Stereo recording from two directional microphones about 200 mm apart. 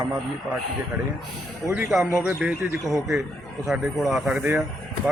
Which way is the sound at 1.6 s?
10° right (ahead or behind).